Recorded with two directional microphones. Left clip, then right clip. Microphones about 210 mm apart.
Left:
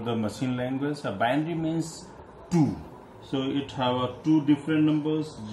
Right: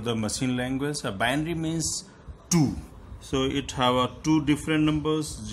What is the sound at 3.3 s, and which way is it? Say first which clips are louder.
Speech: right 2 dB; 45° right (ahead or behind).